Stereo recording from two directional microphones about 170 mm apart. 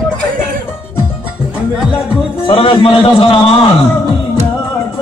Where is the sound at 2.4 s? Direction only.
30° left (ahead or behind).